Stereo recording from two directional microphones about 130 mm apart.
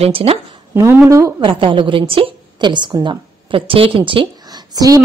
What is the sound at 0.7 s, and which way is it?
Speech, 15° right (ahead or behind).